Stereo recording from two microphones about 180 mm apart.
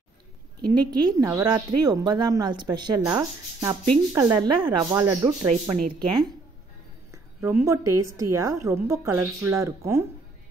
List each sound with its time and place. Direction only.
0.7 s a woman's voice: 20° right (ahead or behind)
3.6 s a woman's voice: 10° right (ahead or behind)
4.5 s a woman's voice: 25° right (ahead or behind)
5.0 s a woman's voice: 15° right (ahead or behind)
7.1 s a woman's voice: 15° right (ahead or behind)